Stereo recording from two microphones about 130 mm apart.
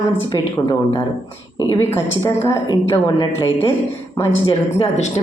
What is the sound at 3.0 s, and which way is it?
Speech, 40° left (ahead or behind).